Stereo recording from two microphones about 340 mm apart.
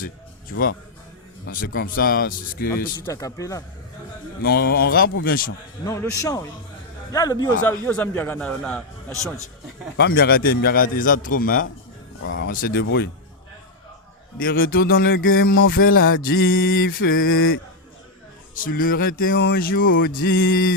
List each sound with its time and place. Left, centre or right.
0.5 s speech: left
1.5 s music: left
3.1 s a man's voice: centre
4.4 s music: left
5.8 s a man's voice: centre
10.0 s music: left
12.2 s speech: left
12.5 s music: left
14.3 s music: left